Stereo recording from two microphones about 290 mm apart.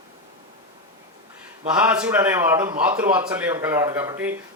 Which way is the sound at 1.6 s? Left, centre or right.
Centre.